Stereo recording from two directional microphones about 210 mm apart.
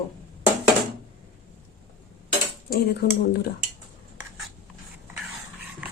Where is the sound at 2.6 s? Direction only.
45° left (ahead or behind).